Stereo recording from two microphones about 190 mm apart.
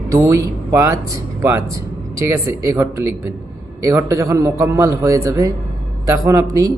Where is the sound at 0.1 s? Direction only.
15° right (ahead or behind).